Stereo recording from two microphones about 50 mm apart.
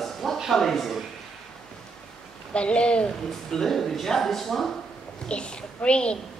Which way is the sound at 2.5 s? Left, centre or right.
Left.